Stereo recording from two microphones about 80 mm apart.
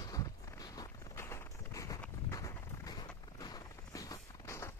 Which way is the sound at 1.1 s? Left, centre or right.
Left.